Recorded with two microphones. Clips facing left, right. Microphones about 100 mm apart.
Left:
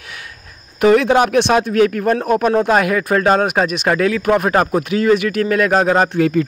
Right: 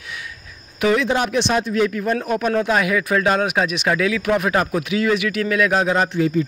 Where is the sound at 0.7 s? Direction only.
50° left (ahead or behind).